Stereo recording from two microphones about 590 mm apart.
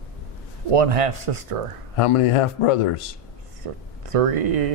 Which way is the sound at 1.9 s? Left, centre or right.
Left.